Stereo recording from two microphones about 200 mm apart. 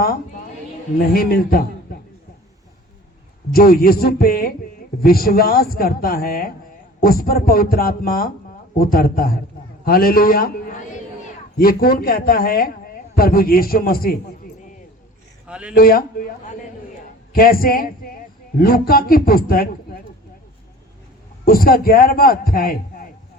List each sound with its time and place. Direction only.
0.9 s a man's voice: 50° left (ahead or behind)
3.5 s a man's voice: 50° left (ahead or behind)
15.4 s speech: 5° right (ahead or behind)
15.7 s a man's voice: 45° left (ahead or behind)
21.4 s a man's voice: 45° left (ahead or behind)